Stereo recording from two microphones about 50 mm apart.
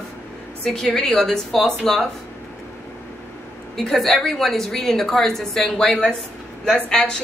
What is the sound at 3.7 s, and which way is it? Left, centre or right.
A woman's voice, centre.